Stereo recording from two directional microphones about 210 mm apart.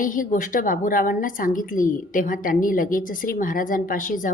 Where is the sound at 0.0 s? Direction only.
40° left (ahead or behind).